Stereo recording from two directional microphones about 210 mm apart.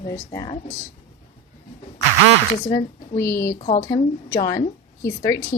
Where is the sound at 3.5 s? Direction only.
30° left (ahead or behind).